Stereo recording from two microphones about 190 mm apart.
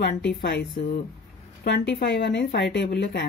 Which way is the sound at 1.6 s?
65° left (ahead or behind).